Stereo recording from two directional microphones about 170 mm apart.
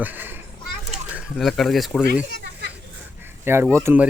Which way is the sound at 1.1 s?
5° right (ahead or behind).